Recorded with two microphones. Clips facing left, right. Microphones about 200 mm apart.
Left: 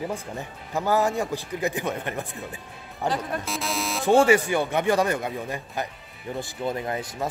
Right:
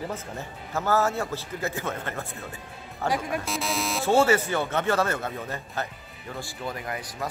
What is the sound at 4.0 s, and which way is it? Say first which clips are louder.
Speech: left 3 dB; 15° left (ahead or behind).